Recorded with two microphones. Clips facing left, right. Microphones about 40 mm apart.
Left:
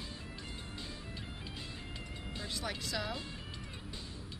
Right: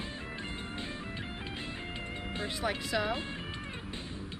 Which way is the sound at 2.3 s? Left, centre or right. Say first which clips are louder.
Right 6 dB; right.